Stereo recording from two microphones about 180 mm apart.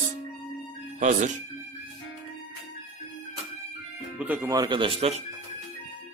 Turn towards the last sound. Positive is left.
turn(degrees=-30)  # may be behind; listen again after turning